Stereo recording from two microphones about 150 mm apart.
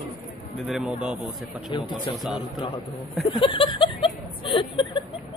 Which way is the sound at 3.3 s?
35° left (ahead or behind).